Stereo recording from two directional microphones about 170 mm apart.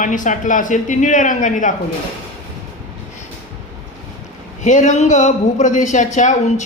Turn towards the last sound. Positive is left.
turn(degrees=45)  # may be behind; listen again after turning